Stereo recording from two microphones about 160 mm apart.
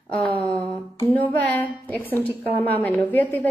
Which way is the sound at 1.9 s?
10° left (ahead or behind).